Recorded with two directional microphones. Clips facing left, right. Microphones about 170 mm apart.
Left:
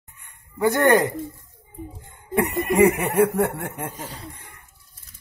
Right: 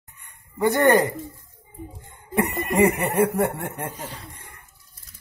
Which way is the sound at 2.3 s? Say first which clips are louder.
Left 2 dB; centre (ahead or behind).